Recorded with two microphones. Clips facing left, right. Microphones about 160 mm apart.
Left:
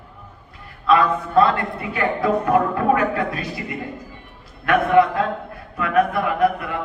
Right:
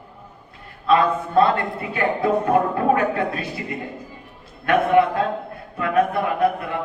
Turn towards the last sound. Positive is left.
turn(degrees=-25)  # may be behind; listen again after turning